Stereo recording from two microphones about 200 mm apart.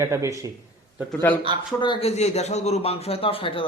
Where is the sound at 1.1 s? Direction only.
10° left (ahead or behind).